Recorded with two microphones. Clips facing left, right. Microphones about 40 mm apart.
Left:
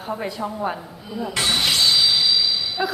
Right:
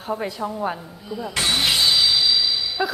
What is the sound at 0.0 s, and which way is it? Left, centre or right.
A woman's voice, centre.